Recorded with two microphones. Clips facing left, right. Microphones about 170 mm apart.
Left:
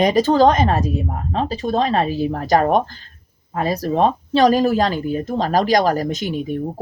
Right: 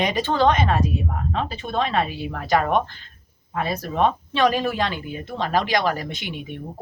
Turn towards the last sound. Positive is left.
turn(degrees=40)  # may be behind; listen again after turning